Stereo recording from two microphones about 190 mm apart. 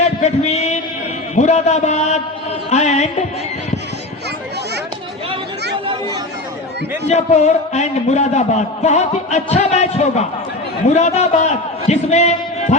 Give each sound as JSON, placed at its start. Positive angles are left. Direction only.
{"t": 0.2, "sound": "a sound", "side_deg": 35}
{"t": 1.4, "sound": "a man's voice", "side_deg": 35}
{"t": 7.1, "sound": "a man's voice", "side_deg": 35}